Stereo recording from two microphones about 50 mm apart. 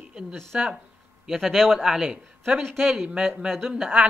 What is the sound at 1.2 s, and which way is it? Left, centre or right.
Speech, centre.